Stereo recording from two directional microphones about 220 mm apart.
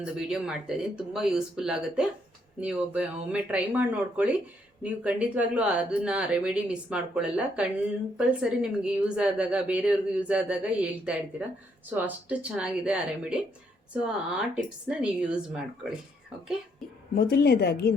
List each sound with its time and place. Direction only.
0.0 s a woman's voice: 5° right (ahead or behind)
17.2 s speech: 45° left (ahead or behind)